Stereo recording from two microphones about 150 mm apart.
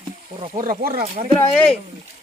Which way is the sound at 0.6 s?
80° right.